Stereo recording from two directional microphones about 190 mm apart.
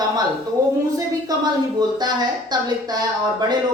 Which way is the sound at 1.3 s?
20° right (ahead or behind).